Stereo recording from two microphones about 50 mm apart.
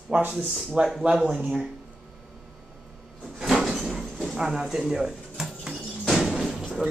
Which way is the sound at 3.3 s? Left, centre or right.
Centre.